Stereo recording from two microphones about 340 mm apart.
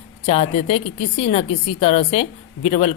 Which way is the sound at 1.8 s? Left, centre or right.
Centre.